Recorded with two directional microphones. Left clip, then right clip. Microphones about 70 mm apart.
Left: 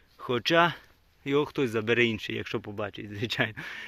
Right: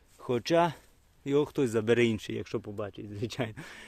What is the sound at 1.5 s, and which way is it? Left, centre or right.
Speech, right.